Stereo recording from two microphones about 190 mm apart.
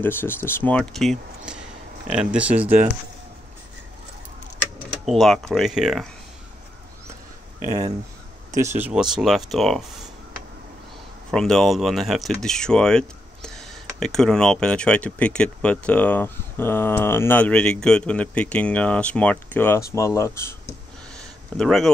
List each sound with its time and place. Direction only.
0.0 s speech: 10° left (ahead or behind); by 2.9 s 10° right (ahead or behind)
5.0 s speech: centre (ahead or behind)
7.6 s speech: 20° right (ahead or behind); by 9.8 s centre (ahead or behind)
11.3 s speech: 5° left (ahead or behind)
21.5 s speech: centre (ahead or behind)